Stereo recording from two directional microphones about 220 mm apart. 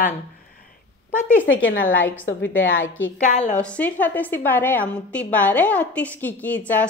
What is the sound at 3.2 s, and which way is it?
Speech, 35° left (ahead or behind).